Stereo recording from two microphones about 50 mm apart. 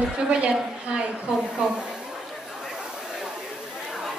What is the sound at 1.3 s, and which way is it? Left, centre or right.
Speech, centre.